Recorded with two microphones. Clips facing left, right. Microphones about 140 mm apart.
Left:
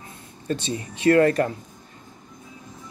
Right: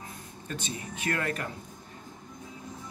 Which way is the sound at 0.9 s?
35° left (ahead or behind).